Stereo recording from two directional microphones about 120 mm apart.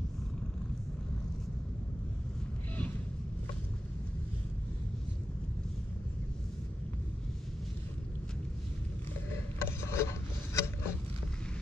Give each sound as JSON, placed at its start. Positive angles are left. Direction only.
{"t": 9.6, "sound": "filing", "side_deg": 20}